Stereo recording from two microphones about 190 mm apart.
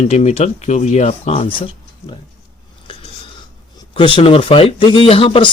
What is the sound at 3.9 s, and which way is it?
Speech, 25° left (ahead or behind).